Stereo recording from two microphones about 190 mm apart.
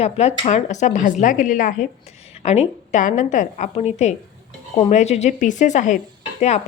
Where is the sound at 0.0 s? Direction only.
35° left (ahead or behind).